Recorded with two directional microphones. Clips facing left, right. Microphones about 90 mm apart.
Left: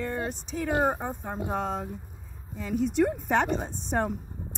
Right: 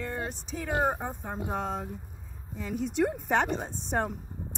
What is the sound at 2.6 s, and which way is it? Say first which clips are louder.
A woman's voice: left 3 dB; 20° right (ahead or behind).